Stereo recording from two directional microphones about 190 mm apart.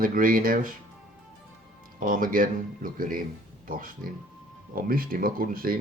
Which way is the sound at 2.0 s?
45° right (ahead or behind).